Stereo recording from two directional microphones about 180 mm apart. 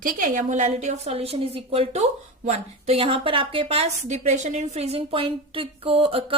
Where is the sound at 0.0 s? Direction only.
45° right (ahead or behind).